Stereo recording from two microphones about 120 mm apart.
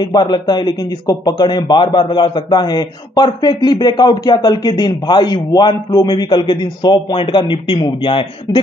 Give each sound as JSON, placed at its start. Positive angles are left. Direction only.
{"t": 0.0, "sound": "a man's voice", "side_deg": 35}